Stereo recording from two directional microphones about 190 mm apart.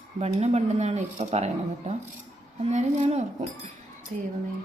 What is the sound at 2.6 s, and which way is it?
Speech, 40° right (ahead or behind).